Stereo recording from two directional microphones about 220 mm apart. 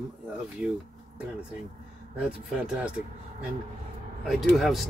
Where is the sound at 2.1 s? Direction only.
5° right (ahead or behind).